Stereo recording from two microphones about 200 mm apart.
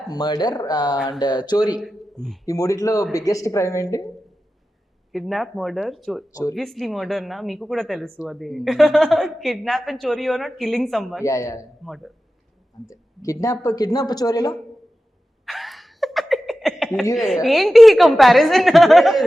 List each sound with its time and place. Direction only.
0.1 s speech: 20° left (ahead or behind)
1.7 s a man's voice: centre (ahead or behind)
2.5 s speech: 15° left (ahead or behind)
5.1 s a woman's voice: centre (ahead or behind)
11.2 s speech: 15° left (ahead or behind)
11.9 s a woman's voice: centre (ahead or behind)
13.2 s speech: 15° left (ahead or behind)
15.4 s laughter: centre (ahead or behind)
17.2 s a woman's voice: centre (ahead or behind)